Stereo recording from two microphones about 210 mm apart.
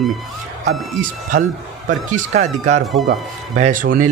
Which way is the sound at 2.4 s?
35° right (ahead or behind).